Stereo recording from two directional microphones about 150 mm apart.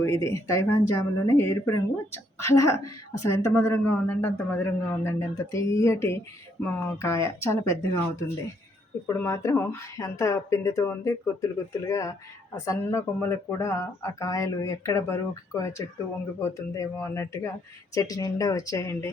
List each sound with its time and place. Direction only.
0.0 s a woman's voice: 20° left (ahead or behind)